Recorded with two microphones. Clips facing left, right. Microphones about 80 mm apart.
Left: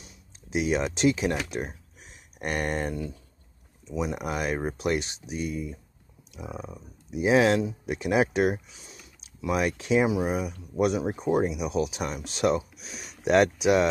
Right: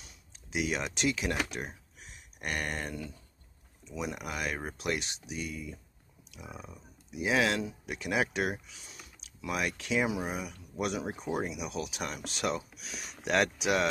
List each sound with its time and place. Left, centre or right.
0.0 s speech: left